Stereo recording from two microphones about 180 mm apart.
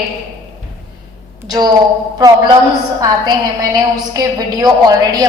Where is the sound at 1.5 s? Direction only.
20° right (ahead or behind).